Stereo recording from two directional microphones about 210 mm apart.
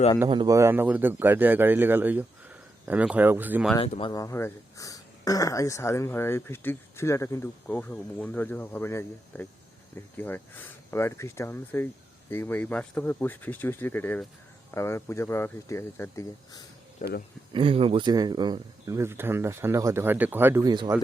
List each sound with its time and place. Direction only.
0.3 s speech: 20° right (ahead or behind)
3.8 s speech: 25° left (ahead or behind)
17.0 s speech: 45° left (ahead or behind)
17.5 s speech: 25° right (ahead or behind)